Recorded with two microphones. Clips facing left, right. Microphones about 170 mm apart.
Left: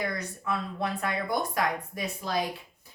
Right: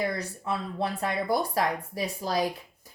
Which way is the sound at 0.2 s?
30° right (ahead or behind).